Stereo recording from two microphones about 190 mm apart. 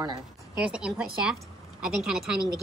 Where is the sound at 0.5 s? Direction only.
5° right (ahead or behind).